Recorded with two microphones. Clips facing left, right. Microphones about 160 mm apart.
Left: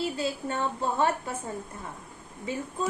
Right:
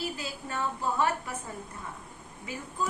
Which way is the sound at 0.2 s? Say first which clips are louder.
Left 5 dB; 30° left (ahead or behind).